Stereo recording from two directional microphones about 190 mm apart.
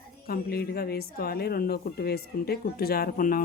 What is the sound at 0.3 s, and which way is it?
Speech, 55° left (ahead or behind).